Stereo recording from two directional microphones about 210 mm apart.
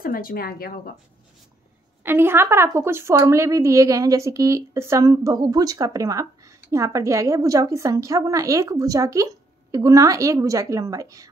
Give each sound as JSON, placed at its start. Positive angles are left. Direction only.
{"t": 0.0, "sound": "speech", "side_deg": 45}
{"t": 2.0, "sound": "a woman's voice", "side_deg": -10}